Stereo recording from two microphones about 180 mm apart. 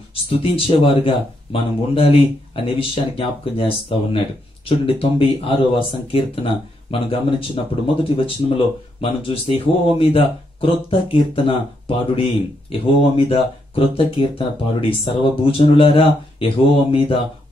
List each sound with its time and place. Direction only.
0.1 s speech: 30° left (ahead or behind)